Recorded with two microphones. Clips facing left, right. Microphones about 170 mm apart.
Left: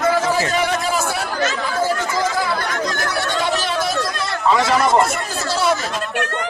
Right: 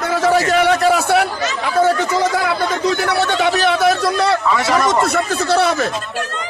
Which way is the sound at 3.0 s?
70° right (ahead or behind).